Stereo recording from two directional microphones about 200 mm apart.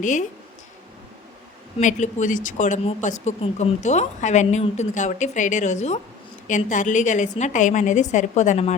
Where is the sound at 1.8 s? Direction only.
40° left (ahead or behind).